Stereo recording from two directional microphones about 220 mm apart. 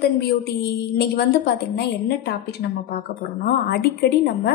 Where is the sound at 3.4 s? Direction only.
50° left (ahead or behind).